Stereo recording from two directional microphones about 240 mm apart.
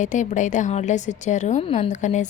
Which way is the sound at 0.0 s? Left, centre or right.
Left.